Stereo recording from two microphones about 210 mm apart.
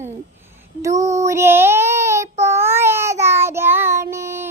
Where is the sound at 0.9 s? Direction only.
35° right (ahead or behind).